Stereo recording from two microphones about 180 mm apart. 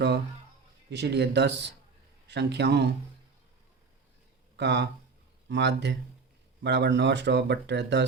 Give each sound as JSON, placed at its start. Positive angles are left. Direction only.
{"t": 0.9, "sound": "speech", "side_deg": -70}
{"t": 4.5, "sound": "speech", "side_deg": -70}